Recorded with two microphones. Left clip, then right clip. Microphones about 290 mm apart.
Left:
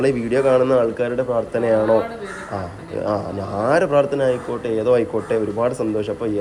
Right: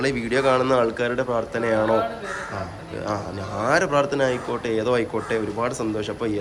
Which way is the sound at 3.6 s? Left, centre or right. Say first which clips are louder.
Left 3 dB; centre.